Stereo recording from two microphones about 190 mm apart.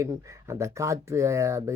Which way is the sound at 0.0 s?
15° right (ahead or behind).